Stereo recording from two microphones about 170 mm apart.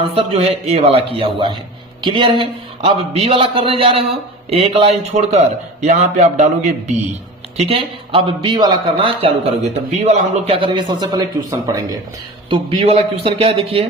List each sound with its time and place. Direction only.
0.1 s a man's voice: 35° right (ahead or behind)
12.5 s a man's voice: 35° right (ahead or behind)